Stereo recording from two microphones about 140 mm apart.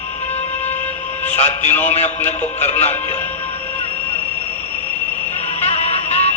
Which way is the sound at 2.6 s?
50° left (ahead or behind).